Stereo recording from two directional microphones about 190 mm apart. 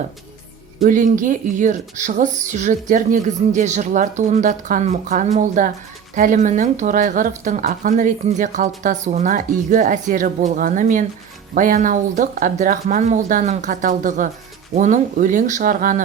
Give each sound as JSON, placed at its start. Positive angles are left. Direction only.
{"t": 0.8, "sound": "speech", "side_deg": -45}